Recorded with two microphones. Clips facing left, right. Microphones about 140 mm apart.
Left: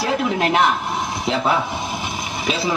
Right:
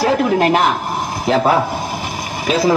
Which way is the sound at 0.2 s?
50° right (ahead or behind).